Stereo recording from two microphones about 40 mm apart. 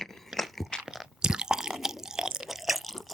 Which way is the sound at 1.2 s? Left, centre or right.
Centre.